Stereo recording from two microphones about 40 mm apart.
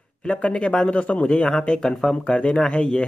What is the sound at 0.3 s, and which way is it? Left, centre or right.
Speech, left.